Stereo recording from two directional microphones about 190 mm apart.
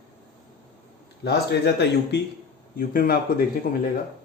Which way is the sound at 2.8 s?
50° left (ahead or behind).